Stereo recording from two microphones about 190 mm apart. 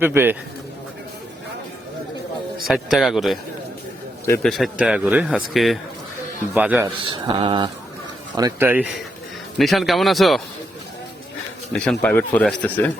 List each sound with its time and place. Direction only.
0.0 s a man's voice: 10° right (ahead or behind)
2.6 s speech: centre (ahead or behind)
4.4 s a man's voice: centre (ahead or behind)
6.8 s speech: 25° right (ahead or behind)
8.4 s a man's voice: 15° right (ahead or behind); by 10.4 s centre (ahead or behind)
11.7 s speech: 5° left (ahead or behind)